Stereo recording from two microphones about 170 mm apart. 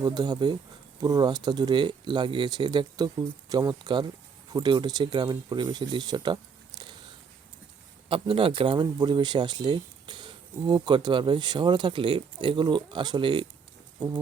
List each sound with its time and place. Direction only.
0.0 s speech: 25° right (ahead or behind)
8.1 s speech: 30° right (ahead or behind)